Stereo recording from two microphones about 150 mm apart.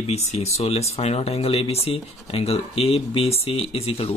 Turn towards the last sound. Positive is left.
turn(degrees=40)  # may be behind; listen again after turning